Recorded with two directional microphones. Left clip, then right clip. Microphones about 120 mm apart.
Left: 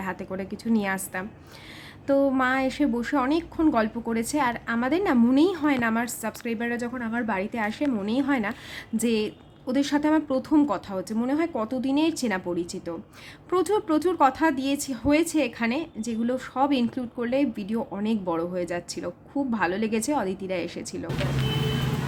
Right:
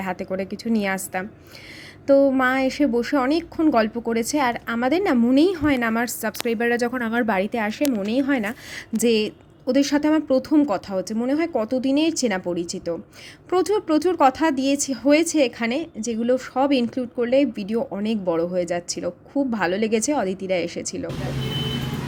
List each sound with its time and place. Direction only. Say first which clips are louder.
0.0 s a woman's voice: right 5 dB; 25° right (ahead or behind)